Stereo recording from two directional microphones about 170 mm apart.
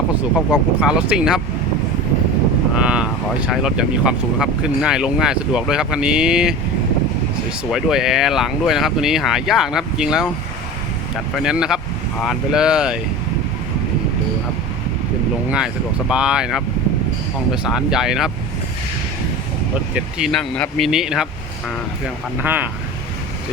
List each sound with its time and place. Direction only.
0.5 s speech: 5° right (ahead or behind)
2.7 s speech: 5° right (ahead or behind)
7.7 s speech: centre (ahead or behind)
11.3 s speech: 5° right (ahead or behind)
15.4 s speech: 5° right (ahead or behind)
19.9 s speech: 5° right (ahead or behind)